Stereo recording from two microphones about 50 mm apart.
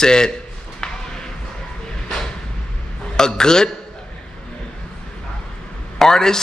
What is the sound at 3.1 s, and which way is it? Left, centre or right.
Speech, centre.